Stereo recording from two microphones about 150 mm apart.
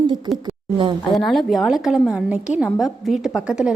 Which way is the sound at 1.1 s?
Centre (ahead or behind).